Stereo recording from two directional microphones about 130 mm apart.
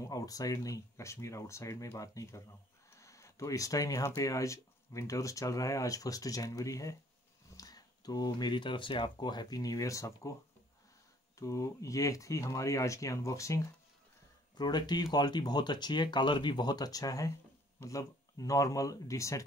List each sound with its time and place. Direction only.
0.0 s speech: 25° left (ahead or behind)
11.3 s speech: 25° left (ahead or behind)